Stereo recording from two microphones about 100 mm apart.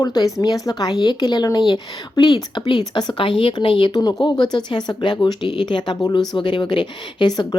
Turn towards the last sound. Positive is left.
turn(degrees=45)  # may be behind; listen again after turning